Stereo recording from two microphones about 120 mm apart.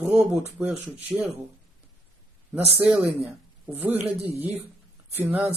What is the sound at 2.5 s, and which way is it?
Speech, 15° right (ahead or behind).